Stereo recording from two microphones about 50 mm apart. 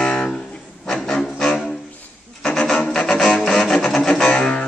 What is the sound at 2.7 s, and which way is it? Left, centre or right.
Music, centre.